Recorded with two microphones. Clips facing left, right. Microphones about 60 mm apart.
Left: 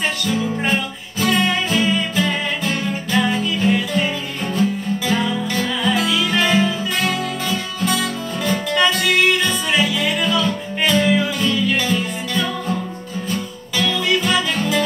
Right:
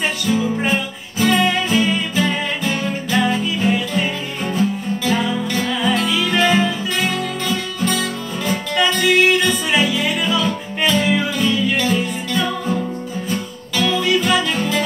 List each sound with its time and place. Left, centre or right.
0.2 s music: centre
7.2 s guitar: centre
8.0 s music: centre